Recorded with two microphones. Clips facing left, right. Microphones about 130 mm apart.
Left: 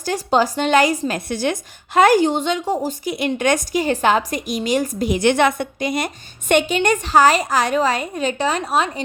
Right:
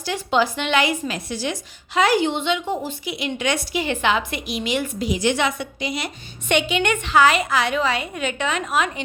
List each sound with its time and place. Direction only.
0.0 s a woman's voice: 40° left (ahead or behind)